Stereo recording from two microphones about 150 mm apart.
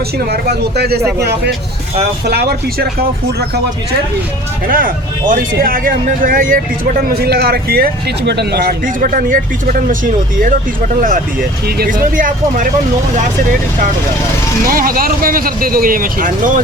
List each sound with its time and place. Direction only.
0.3 s speech: 90° right
4.7 s speech: 65° right (ahead or behind)
7.1 s speech: 85° right; by 10.5 s 65° right (ahead or behind)
11.8 s speech: 70° right (ahead or behind)
14.7 s speech: 70° right (ahead or behind)